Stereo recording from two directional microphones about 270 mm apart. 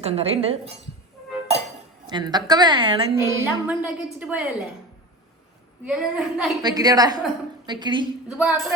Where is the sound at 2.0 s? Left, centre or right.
Centre.